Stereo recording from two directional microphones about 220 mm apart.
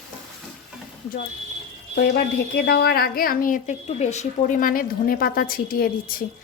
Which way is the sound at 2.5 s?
45° left (ahead or behind).